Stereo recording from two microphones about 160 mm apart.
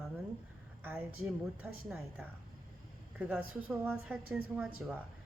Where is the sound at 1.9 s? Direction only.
5° right (ahead or behind).